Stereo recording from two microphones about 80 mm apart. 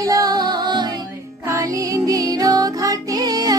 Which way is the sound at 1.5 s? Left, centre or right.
Right.